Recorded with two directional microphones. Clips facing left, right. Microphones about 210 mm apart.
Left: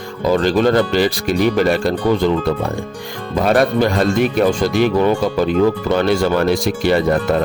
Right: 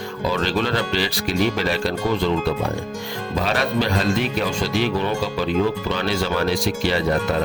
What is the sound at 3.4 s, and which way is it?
Speech, 50° left (ahead or behind).